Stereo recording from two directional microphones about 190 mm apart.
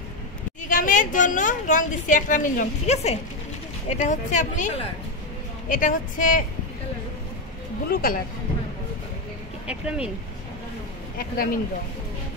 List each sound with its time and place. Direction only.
0.7 s a woman's voice: 45° left (ahead or behind)
7.9 s a woman's voice: 50° left (ahead or behind)
9.7 s speech: 5° right (ahead or behind)
11.1 s a woman's voice: 50° left (ahead or behind)